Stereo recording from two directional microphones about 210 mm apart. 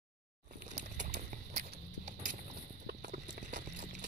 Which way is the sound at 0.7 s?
35° right (ahead or behind).